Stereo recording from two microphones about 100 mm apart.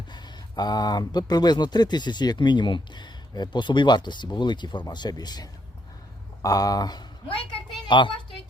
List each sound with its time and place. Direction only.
0.1 s speech: 45° left (ahead or behind)
7.9 s speech: 50° left (ahead or behind)